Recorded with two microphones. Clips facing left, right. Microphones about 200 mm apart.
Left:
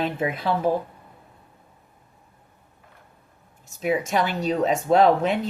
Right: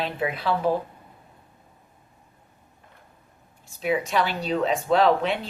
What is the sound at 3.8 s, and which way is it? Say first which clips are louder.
Speech: left 1 dB; 45° left (ahead or behind).